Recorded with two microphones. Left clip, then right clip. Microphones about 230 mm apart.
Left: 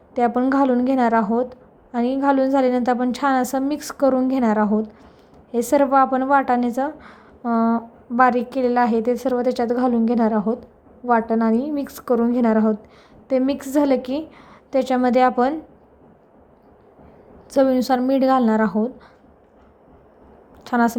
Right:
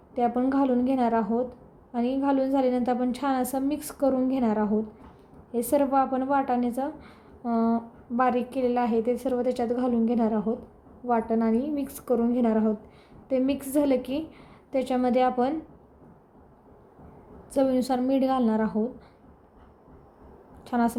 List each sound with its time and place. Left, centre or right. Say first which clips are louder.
0.1 s a woman's voice: left 6 dB; centre
17.5 s a woman's voice: left 7 dB; centre
20.7 s a woman's voice: left 7 dB; centre